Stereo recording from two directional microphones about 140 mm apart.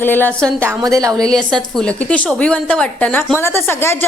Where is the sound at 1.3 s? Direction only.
5° left (ahead or behind).